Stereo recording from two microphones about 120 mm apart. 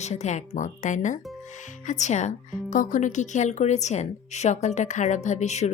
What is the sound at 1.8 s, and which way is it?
A woman's voice, 75° left (ahead or behind).